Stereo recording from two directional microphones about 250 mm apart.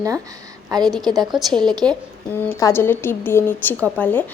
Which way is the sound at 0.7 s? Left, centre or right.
Centre.